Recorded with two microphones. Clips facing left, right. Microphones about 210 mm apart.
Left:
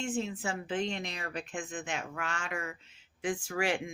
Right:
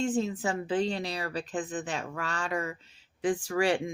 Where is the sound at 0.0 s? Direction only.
35° right (ahead or behind).